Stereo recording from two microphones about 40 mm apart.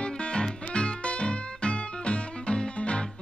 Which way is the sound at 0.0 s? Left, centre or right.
Left.